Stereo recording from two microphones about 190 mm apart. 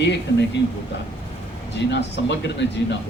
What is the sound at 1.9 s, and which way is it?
Speech, 65° left (ahead or behind).